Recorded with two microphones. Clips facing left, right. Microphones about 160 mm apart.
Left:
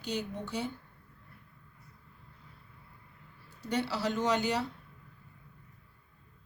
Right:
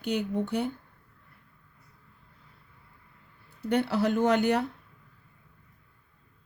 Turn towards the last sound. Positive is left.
turn(degrees=-55)  # may be behind; listen again after turning